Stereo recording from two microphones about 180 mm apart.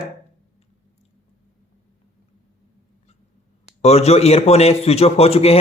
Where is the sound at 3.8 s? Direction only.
35° left (ahead or behind).